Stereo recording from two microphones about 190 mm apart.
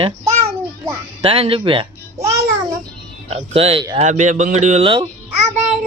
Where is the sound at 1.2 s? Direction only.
30° right (ahead or behind).